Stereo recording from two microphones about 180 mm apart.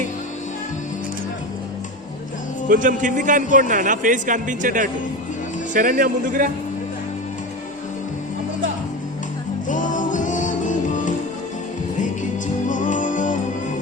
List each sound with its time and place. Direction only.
2.6 s a man's voice: 45° right (ahead or behind)
9.6 s music: 45° left (ahead or behind)
12.6 s music: 45° left (ahead or behind)